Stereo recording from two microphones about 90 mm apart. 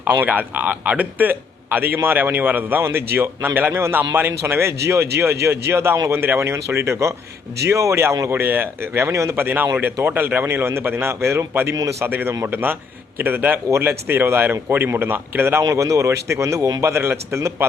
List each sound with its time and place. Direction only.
0.0 s speech: 20° right (ahead or behind)
9.4 s a man's voice: 20° right (ahead or behind)
12.0 s a man's voice: 20° right (ahead or behind)